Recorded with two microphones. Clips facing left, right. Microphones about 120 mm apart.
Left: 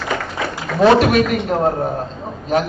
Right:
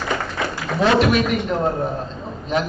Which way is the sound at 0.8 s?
45° left (ahead or behind).